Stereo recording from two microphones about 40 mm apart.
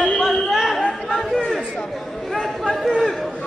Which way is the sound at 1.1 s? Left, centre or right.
Centre.